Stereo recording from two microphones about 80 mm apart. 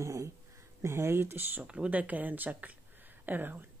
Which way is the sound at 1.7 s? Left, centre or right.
Centre.